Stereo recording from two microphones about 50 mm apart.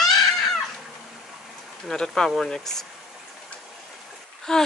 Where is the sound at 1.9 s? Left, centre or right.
Centre.